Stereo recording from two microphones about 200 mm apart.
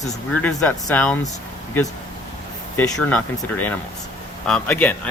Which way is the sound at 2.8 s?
5° left (ahead or behind).